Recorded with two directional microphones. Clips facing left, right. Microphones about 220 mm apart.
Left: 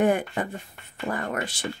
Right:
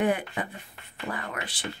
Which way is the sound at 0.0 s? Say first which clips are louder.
Left 4 dB; 45° left (ahead or behind).